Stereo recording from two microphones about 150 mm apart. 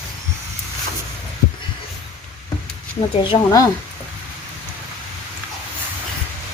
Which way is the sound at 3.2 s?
25° left (ahead or behind).